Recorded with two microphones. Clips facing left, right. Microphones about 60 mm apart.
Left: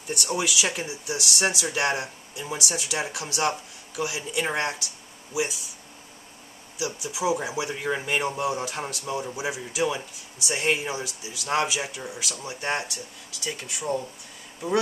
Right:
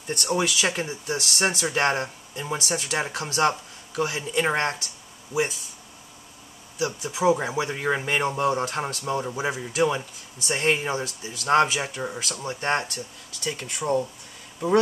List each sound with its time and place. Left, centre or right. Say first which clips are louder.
0.7 s speech: right 3 dB; right
6.8 s speech: right 4 dB; right